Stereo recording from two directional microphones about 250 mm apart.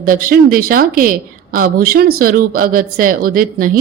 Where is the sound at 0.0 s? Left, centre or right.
Right.